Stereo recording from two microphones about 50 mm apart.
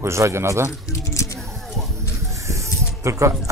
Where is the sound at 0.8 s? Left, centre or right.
Left.